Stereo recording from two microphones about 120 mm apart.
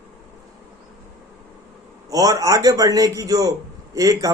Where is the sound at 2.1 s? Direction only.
30° right (ahead or behind).